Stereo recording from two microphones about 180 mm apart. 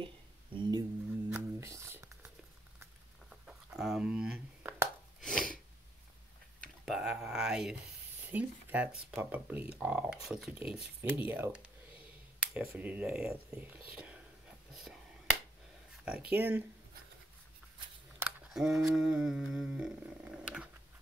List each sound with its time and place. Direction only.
0.6 s speech: 25° right (ahead or behind)
1.3 s music: 15° right (ahead or behind)
3.3 s a sound: centre (ahead or behind)
5.2 s gasp: 5° left (ahead or behind)
6.6 s speech: centre (ahead or behind)
16.3 s speech: 10° right (ahead or behind)
18.2 s humming: centre (ahead or behind)